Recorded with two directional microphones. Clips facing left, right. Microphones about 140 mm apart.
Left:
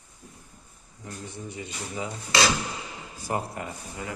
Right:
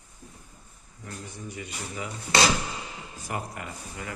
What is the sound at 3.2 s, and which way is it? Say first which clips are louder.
Speech: left 4 dB; 25° left (ahead or behind).